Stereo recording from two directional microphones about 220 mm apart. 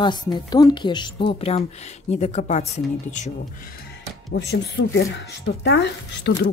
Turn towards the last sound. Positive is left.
turn(degrees=50)  # may be behind; listen again after turning